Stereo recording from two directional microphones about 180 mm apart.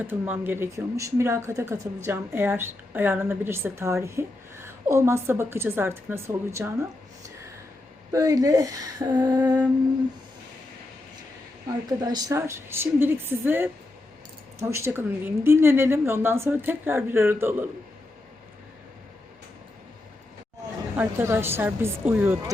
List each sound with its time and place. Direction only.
0.0 s a woman's voice: 10° right (ahead or behind)
8.1 s speech: 20° right (ahead or behind)
11.9 s a woman's voice: 20° right (ahead or behind)
20.9 s a woman's voice: 10° right (ahead or behind)